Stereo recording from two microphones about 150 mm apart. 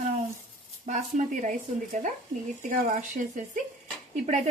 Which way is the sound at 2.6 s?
65° right (ahead or behind).